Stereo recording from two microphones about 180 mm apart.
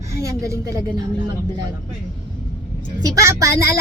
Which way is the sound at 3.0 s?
20° right (ahead or behind).